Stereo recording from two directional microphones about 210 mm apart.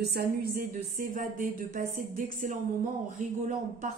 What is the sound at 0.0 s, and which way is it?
A woman's voice, 50° right (ahead or behind).